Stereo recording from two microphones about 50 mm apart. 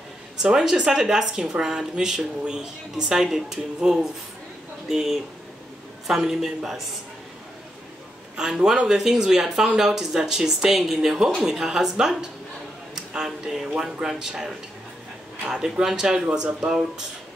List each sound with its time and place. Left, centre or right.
0.4 s speech: centre
8.4 s speech: centre
16.3 s speech: right
16.6 s speech: centre